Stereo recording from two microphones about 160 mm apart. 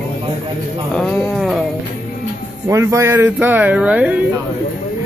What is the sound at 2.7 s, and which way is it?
Speech, 20° right (ahead or behind).